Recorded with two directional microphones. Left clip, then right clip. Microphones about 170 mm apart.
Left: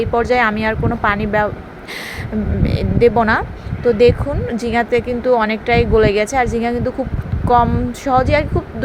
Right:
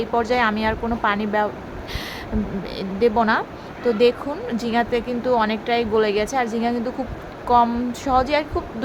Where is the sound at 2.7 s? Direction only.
20° left (ahead or behind).